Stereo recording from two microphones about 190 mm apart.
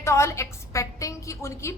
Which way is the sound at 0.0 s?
15° left (ahead or behind).